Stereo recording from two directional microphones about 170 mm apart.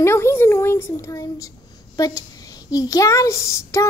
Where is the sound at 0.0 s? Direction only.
15° left (ahead or behind).